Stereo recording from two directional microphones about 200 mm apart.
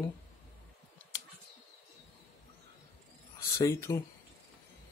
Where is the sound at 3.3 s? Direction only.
15° left (ahead or behind).